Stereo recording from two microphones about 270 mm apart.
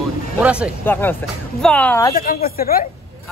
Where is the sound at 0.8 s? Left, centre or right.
Centre.